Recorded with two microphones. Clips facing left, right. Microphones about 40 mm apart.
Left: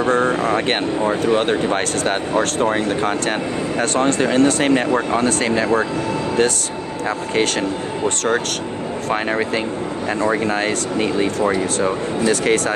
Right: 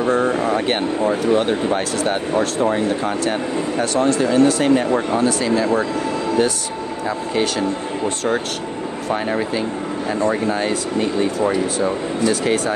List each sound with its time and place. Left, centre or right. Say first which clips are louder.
0.0 s vehicle: left 1 dB; left
1.3 s speech: even; left
4.9 s speech: even; left
10.2 s speech: left 1 dB; left